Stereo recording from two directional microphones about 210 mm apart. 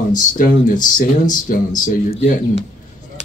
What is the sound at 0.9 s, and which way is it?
Speech, 40° left (ahead or behind).